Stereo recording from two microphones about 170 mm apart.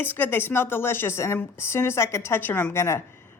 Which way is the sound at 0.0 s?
10° left (ahead or behind).